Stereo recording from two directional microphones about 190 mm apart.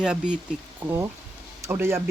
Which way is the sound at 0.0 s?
5° right (ahead or behind).